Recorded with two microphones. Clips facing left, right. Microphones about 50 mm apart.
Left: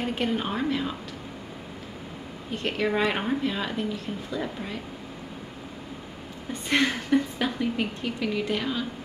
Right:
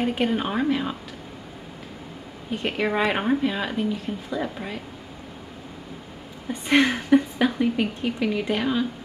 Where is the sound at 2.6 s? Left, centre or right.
Centre.